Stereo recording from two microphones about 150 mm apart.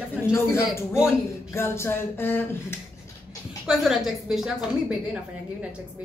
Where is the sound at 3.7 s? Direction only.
Centre (ahead or behind).